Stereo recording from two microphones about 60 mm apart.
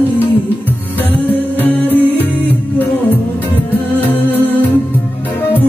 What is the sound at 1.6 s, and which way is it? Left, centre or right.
Music, left.